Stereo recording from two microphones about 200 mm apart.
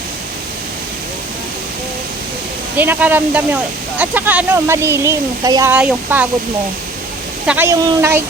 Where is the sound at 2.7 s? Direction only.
10° right (ahead or behind).